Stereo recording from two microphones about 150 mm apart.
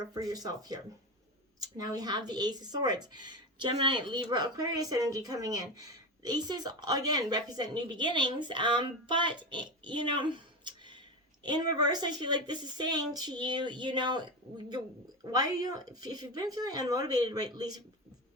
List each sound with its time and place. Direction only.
0.0 s a woman's voice: 25° right (ahead or behind)